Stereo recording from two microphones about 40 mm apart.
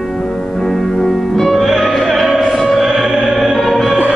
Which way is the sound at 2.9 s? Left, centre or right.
Centre.